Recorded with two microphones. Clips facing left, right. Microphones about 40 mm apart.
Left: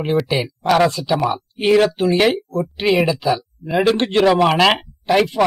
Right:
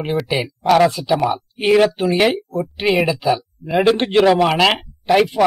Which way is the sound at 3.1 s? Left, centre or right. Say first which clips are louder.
Right 1 dB; centre.